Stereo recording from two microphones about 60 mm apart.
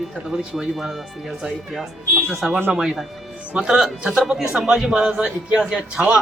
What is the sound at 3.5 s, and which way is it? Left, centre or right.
Speech, right.